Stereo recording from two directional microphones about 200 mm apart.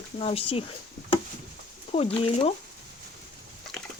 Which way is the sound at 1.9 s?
30° left (ahead or behind).